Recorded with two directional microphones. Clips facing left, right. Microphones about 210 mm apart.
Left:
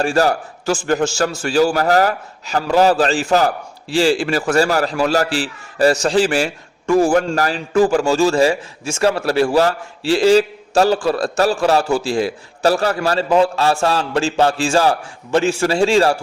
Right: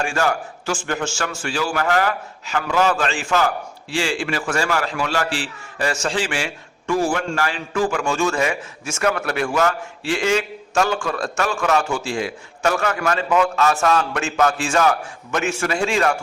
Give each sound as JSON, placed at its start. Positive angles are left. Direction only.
{"t": 0.0, "sound": "a man's voice", "side_deg": 35}